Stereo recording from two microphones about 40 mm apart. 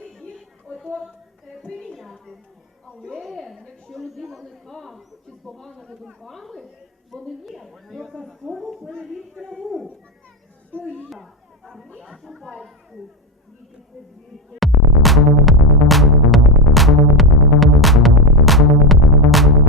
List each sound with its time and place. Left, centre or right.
1.8 s a sound: centre
3.8 s speech: centre
5.5 s speech: centre
6.2 s speech: centre
10.7 s speech: left
11.1 s chatter: centre
12.1 s speech: centre
14.6 s music: centre